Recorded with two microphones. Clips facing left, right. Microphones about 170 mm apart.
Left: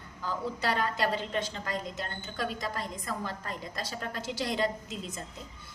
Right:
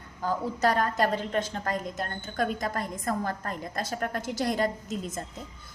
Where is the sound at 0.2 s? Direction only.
45° right (ahead or behind).